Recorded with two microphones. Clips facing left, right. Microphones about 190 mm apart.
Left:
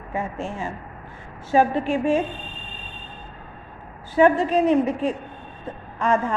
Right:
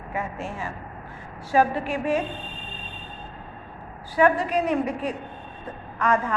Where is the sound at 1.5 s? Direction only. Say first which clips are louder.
Left 3 dB; 25° left (ahead or behind).